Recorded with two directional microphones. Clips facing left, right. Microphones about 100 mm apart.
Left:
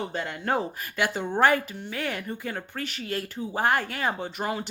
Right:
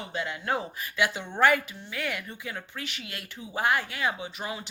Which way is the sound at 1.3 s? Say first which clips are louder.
Left 2 dB; 35° left (ahead or behind).